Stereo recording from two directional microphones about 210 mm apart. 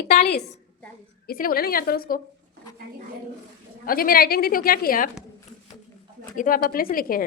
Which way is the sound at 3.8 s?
45° left (ahead or behind).